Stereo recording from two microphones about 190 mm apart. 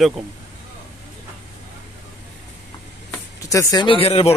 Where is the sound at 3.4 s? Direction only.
15° left (ahead or behind).